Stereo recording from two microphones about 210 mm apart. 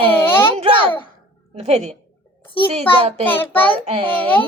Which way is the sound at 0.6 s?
25° right (ahead or behind).